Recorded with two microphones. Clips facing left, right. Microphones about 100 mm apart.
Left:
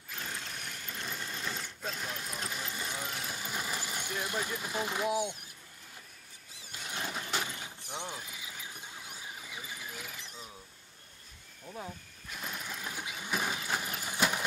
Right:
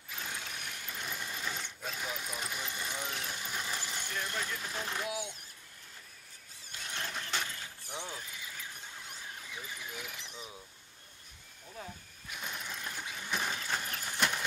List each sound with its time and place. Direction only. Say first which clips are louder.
0.1 s sewing machine: left 1 dB; centre (ahead or behind)
5.0 s speech: left 7 dB; 20° left (ahead or behind)
6.7 s a sound: left 2 dB; 10° left (ahead or behind)
11.6 s speech: left 4 dB; 20° left (ahead or behind)
12.3 s sewing machine: left 1 dB; centre (ahead or behind)